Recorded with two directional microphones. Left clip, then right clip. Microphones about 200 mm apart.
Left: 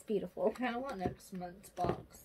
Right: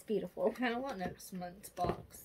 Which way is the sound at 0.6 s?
30° right (ahead or behind).